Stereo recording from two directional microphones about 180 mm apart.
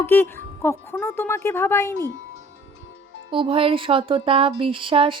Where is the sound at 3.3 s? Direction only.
30° right (ahead or behind).